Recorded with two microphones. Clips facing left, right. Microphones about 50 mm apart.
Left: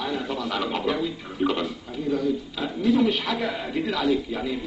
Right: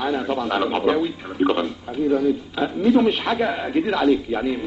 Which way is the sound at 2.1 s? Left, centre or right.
Right.